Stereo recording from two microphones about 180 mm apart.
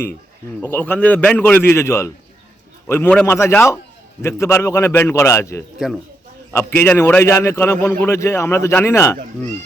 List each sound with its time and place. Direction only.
0.6 s a man's voice: 10° left (ahead or behind)